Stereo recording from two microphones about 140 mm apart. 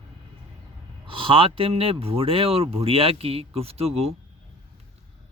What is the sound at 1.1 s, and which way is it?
Speech, 40° right (ahead or behind).